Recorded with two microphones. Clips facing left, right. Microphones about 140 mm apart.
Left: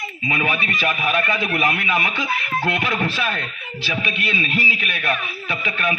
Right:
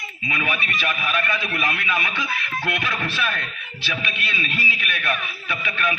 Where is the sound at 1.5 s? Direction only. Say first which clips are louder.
Left 5 dB; 20° left (ahead or behind).